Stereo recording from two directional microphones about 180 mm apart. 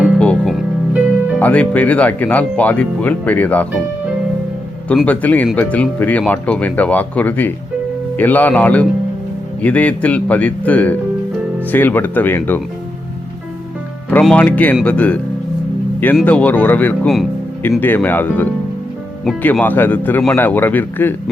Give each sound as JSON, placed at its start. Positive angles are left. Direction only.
{"t": 0.0, "sound": "music", "side_deg": 5}
{"t": 1.4, "sound": "speech", "side_deg": 10}
{"t": 4.9, "sound": "speech", "side_deg": 10}
{"t": 14.1, "sound": "speech", "side_deg": 5}
{"t": 16.2, "sound": "speech", "side_deg": 10}